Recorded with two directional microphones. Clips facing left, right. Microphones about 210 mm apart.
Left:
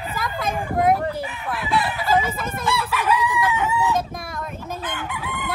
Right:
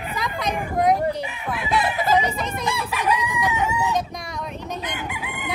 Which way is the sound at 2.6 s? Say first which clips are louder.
Left 2 dB; 15° right (ahead or behind).